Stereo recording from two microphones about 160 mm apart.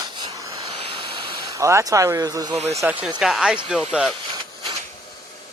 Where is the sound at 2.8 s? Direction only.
10° right (ahead or behind).